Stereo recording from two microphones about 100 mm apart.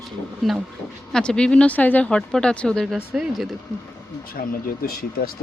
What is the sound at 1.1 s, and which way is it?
Speech, 10° left (ahead or behind).